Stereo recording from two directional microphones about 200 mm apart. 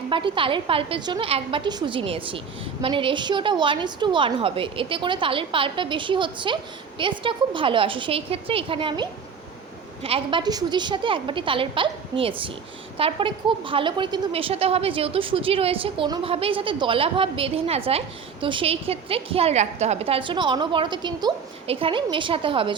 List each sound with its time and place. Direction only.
0.1 s a woman's voice: 25° right (ahead or behind)